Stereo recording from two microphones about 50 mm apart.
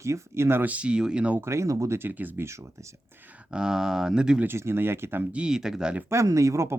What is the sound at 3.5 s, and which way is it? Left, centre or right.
Speech, centre.